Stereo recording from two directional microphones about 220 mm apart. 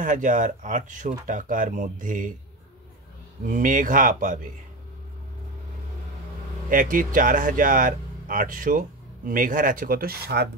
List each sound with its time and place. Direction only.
0.0 s speech: 35° right (ahead or behind)
3.4 s speech: 35° right (ahead or behind)
6.7 s speech: 40° right (ahead or behind)